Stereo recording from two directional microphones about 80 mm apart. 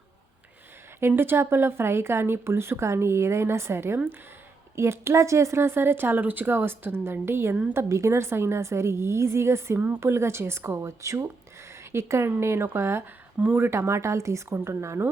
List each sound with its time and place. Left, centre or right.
0.9 s speech: right
13.4 s speech: right
13.7 s speech: right